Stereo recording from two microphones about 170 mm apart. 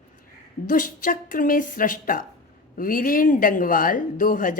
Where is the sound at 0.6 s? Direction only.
55° left (ahead or behind).